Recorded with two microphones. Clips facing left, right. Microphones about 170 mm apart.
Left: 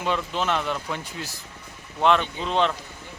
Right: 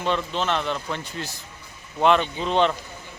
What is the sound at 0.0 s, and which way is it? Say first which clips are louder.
Speech: right 1 dB; 5° left (ahead or behind).